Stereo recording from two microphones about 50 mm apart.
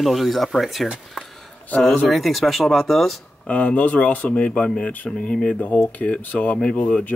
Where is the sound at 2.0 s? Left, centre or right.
Centre.